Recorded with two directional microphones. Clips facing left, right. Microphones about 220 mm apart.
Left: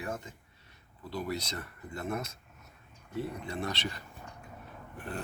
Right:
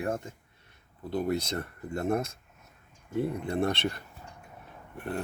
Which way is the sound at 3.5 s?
55° right (ahead or behind).